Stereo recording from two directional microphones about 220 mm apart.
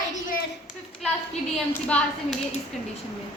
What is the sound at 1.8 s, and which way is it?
Speech, 5° left (ahead or behind).